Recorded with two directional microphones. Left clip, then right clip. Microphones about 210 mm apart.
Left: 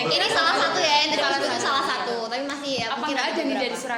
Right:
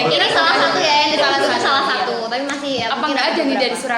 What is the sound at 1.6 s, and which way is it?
A woman's voice, 25° left (ahead or behind).